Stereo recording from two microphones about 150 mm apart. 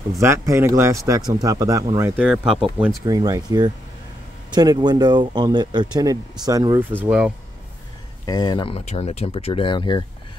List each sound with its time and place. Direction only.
0.2 s speech: 20° right (ahead or behind)
2.0 s speech: 10° right (ahead or behind)
3.1 s speech: 25° right (ahead or behind); by 7.3 s 5° right (ahead or behind)
8.3 s speech: 25° left (ahead or behind)